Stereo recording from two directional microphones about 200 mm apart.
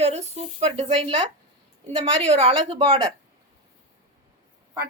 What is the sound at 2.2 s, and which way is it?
Speech, 30° right (ahead or behind).